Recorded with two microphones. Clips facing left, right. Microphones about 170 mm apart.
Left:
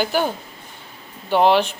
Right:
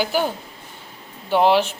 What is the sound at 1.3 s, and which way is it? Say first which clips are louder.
Speech: left 1 dB; 10° right (ahead or behind).